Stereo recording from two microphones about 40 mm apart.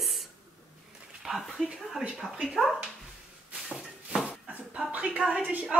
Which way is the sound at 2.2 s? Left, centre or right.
Left.